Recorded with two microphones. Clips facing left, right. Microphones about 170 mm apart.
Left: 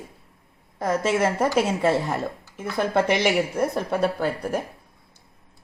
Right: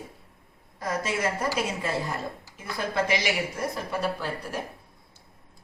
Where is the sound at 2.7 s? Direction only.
55° left (ahead or behind).